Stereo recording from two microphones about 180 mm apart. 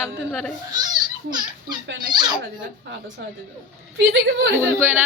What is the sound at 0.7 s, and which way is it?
Children playing, 25° right (ahead or behind).